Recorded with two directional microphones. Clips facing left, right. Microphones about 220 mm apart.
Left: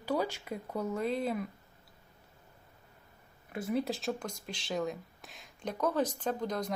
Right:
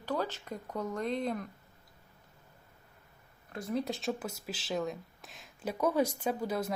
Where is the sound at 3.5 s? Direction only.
5° left (ahead or behind).